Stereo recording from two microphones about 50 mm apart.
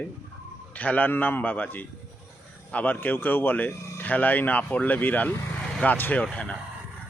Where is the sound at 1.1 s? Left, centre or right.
Left.